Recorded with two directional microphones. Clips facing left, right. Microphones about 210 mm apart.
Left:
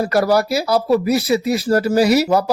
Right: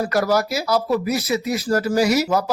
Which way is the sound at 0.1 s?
30° left (ahead or behind).